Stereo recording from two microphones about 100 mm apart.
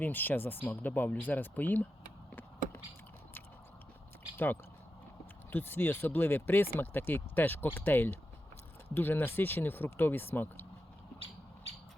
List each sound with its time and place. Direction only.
0.0 s speech: 20° left (ahead or behind)
5.5 s speech: 20° left (ahead or behind)